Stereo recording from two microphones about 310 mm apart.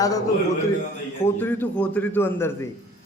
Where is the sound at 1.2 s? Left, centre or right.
Centre.